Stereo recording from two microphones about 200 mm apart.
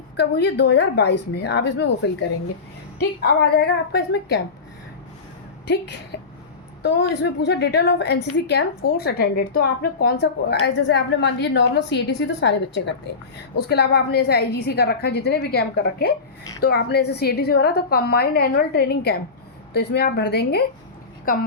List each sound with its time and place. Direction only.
0.2 s a woman's voice: 55° left (ahead or behind)
3.0 s a woman's voice: 50° left (ahead or behind)
6.8 s a woman's voice: 60° left (ahead or behind)